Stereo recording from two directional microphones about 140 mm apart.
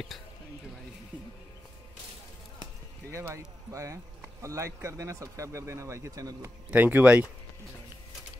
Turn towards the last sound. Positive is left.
turn(degrees=-15)  # may be behind; listen again after turning